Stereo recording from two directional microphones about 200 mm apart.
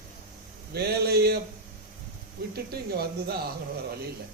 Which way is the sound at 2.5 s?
50° right (ahead or behind).